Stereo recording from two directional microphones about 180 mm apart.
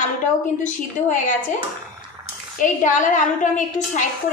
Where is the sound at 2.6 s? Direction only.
45° left (ahead or behind).